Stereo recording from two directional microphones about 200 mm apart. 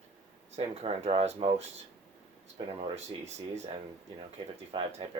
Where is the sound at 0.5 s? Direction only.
30° right (ahead or behind).